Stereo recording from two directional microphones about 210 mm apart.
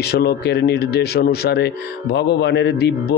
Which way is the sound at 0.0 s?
50° left (ahead or behind).